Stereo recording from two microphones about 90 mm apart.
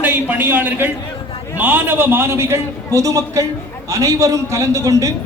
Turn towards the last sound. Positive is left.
turn(degrees=-35)  # may be behind; listen again after turning